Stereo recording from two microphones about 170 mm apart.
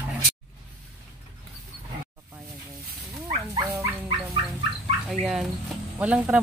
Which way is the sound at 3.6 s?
15° right (ahead or behind).